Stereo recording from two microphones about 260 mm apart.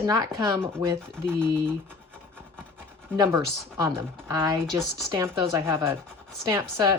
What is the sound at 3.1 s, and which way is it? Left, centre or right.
Speech, centre.